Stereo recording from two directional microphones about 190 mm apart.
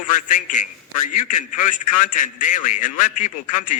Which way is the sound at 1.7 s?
45° left (ahead or behind).